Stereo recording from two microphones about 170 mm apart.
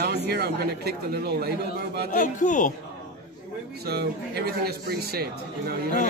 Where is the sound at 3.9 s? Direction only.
70° right (ahead or behind).